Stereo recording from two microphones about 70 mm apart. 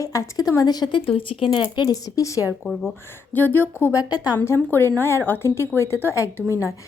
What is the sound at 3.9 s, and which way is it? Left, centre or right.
Speech, left.